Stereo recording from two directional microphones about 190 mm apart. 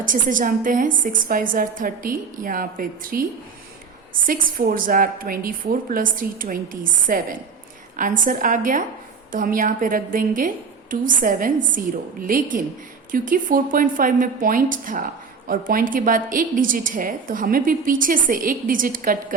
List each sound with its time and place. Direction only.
0.0 s a woman's voice: 45° right (ahead or behind)
4.3 s a woman's voice: 45° right (ahead or behind)